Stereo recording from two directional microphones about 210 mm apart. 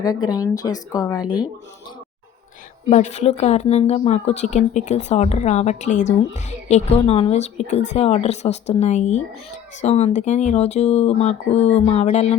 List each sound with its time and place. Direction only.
0.0 s speech: 20° left (ahead or behind)
2.9 s speech: 35° left (ahead or behind)